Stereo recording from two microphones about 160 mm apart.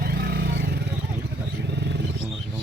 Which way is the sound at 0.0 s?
75° right (ahead or behind).